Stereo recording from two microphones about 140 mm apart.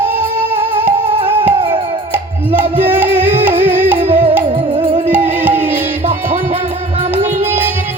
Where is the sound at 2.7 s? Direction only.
15° right (ahead or behind).